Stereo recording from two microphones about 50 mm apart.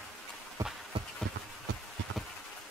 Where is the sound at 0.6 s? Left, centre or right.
Right.